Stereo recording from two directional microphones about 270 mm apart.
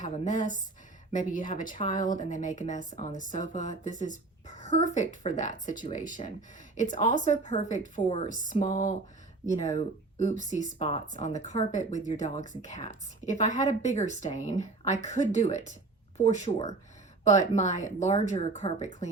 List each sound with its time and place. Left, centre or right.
0.0 s speech: left
10.8 s speech: left